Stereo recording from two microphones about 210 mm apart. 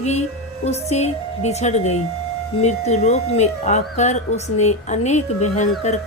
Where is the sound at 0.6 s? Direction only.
30° left (ahead or behind).